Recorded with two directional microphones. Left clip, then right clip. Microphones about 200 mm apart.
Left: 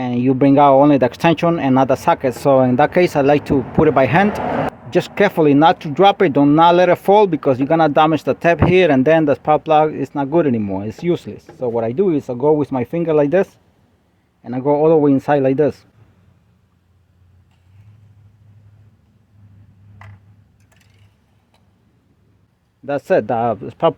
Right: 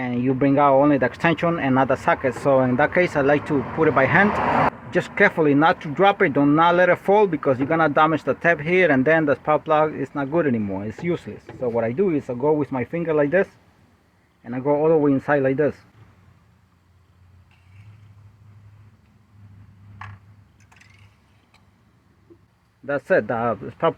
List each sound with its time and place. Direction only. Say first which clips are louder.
0.0 s speech: left 6 dB; 75° left (ahead or behind)
14.4 s speech: left 5 dB; 55° left (ahead or behind)
22.9 s speech: left 4 dB; 55° left (ahead or behind)